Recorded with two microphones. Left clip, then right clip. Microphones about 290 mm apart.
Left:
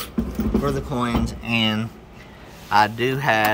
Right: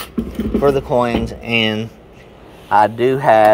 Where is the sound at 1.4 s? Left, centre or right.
Left.